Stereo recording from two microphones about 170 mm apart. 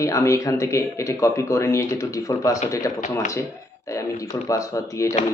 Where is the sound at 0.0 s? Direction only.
20° left (ahead or behind).